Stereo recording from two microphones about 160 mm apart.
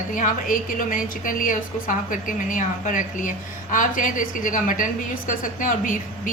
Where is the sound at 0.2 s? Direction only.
60° left (ahead or behind).